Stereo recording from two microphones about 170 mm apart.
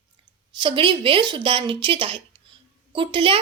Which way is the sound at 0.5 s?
30° right (ahead or behind).